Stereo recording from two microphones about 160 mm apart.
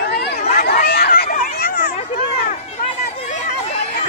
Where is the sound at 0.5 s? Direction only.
70° left (ahead or behind).